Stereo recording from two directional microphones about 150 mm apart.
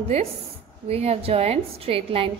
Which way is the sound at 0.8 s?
40° right (ahead or behind).